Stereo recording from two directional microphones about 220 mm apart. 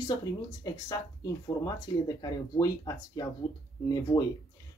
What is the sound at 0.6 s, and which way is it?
A woman's voice, 15° left (ahead or behind).